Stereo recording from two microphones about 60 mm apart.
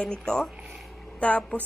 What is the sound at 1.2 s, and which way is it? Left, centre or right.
Speech, left.